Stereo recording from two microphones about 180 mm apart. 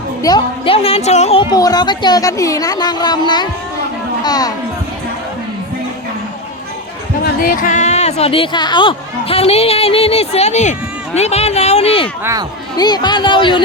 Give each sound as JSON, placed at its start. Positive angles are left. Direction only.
{"t": 0.2, "sound": "a woman's voice", "side_deg": 25}
{"t": 7.4, "sound": "speech", "side_deg": 50}
{"t": 12.2, "sound": "speech", "side_deg": -15}
{"t": 12.7, "sound": "a woman's voice", "side_deg": 25}